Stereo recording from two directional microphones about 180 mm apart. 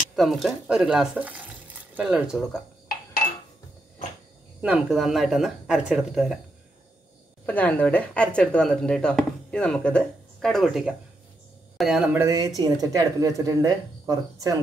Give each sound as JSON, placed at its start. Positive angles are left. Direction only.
{"t": 0.1, "sound": "speech", "side_deg": 0}
{"t": 4.6, "sound": "speech", "side_deg": -5}
{"t": 7.4, "sound": "speech", "side_deg": 10}